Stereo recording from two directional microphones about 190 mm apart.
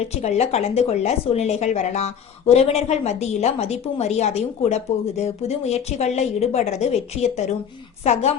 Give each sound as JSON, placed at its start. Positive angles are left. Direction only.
{"t": 0.1, "sound": "a woman's voice", "side_deg": 35}